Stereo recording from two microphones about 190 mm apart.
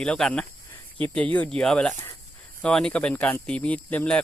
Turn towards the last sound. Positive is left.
turn(degrees=5)  # may be behind; listen again after turning